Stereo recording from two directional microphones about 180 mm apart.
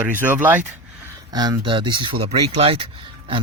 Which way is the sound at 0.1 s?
10° right (ahead or behind).